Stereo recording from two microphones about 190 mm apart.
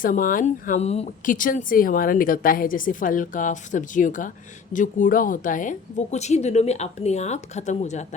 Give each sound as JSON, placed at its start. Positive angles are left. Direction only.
{"t": 0.0, "sound": "a woman's voice", "side_deg": 45}